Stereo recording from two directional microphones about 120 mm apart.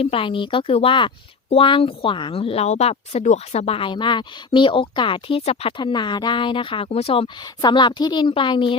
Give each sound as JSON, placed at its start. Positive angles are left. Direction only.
{"t": 0.0, "sound": "speech", "side_deg": 50}
{"t": 5.7, "sound": "speech", "side_deg": 40}